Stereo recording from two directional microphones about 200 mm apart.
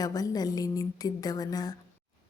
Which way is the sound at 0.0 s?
20° left (ahead or behind).